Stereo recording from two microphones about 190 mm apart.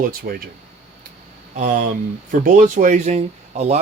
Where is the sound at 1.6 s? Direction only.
45° right (ahead or behind).